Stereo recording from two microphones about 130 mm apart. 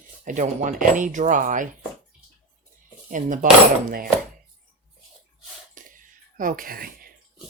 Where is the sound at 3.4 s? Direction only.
75° right (ahead or behind).